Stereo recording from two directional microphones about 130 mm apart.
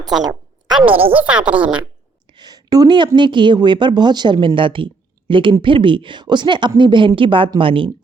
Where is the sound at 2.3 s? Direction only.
30° right (ahead or behind).